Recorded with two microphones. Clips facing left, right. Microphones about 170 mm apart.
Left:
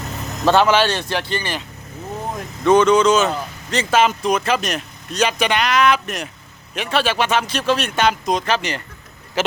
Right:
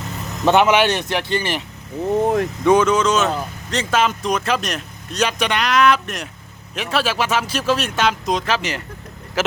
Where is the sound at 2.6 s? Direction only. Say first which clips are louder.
Left 3 dB; 5° right (ahead or behind).